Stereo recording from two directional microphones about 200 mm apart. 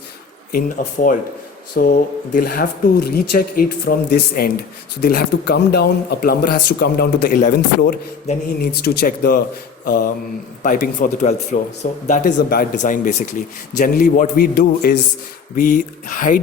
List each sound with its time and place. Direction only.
0.5 s speech: 45° left (ahead or behind)
9.8 s mantra: 45° left (ahead or behind)
10.6 s speech: 45° left (ahead or behind)